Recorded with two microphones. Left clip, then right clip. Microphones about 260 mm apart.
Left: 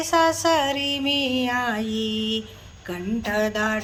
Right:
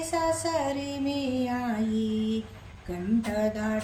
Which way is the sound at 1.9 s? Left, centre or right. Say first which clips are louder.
Left 5 dB; centre.